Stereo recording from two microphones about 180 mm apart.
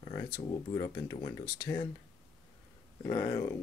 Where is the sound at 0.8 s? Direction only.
20° left (ahead or behind).